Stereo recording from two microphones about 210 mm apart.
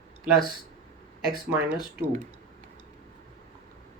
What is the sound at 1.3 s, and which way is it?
Speech, 10° right (ahead or behind).